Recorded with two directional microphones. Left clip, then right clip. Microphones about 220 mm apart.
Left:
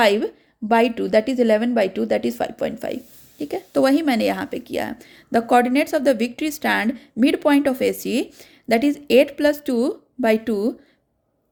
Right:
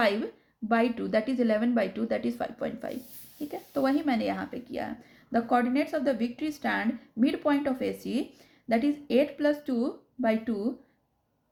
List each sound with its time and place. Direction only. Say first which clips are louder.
0.0 s speech: left 9 dB; 35° left (ahead or behind)